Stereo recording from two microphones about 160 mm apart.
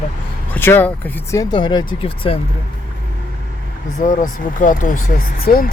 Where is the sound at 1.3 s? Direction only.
25° left (ahead or behind).